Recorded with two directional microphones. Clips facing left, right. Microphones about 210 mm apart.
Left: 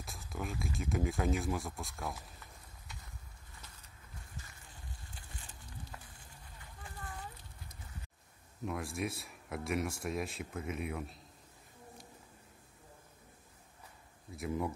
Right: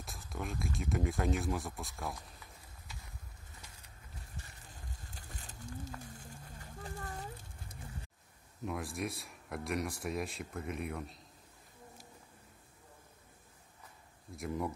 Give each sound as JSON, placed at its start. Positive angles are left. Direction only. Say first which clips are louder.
{"t": 0.0, "sound": "speech", "louder": "even", "side_deg": 0}
{"t": 5.1, "sound": "a sound", "louder": "right 2 dB", "side_deg": -40}
{"t": 8.6, "sound": "speech", "louder": "left 1 dB", "side_deg": 0}
{"t": 14.3, "sound": "speech", "louder": "left 1 dB", "side_deg": 0}